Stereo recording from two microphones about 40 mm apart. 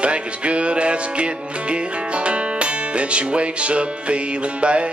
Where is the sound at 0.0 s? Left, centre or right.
Right.